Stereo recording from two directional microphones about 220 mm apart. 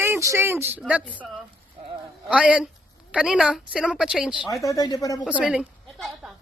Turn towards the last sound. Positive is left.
turn(degrees=0)  # may be behind; listen again after turning